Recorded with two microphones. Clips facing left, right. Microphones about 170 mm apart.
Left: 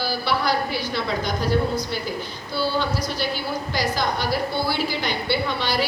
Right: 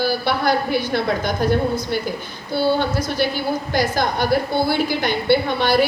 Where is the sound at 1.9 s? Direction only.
55° right (ahead or behind).